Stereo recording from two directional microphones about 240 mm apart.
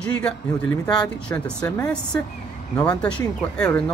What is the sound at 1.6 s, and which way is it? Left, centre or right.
Speech, centre.